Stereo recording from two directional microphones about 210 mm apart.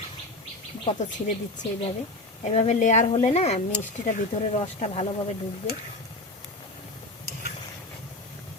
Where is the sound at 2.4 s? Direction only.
30° left (ahead or behind).